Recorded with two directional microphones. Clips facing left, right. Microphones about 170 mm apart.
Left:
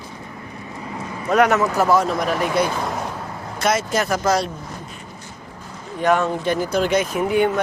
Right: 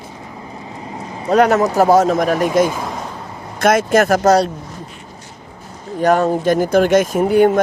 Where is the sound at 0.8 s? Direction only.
25° right (ahead or behind); by 2.6 s 45° right (ahead or behind).